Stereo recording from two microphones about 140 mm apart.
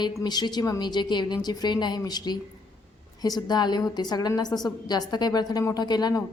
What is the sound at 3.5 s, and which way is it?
A woman's voice, 30° left (ahead or behind).